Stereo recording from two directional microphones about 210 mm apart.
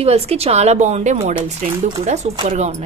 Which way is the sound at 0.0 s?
30° right (ahead or behind).